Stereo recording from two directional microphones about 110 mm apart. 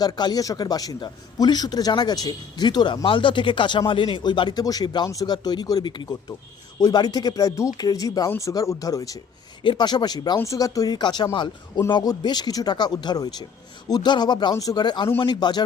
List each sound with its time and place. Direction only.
0.0 s a man's voice: 35° left (ahead or behind)